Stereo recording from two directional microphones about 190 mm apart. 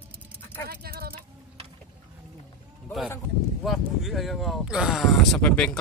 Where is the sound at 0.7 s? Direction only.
55° right (ahead or behind).